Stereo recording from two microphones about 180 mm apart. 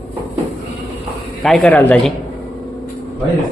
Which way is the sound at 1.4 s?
5° left (ahead or behind).